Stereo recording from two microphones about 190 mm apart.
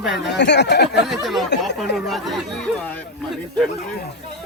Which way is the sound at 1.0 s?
Centre (ahead or behind).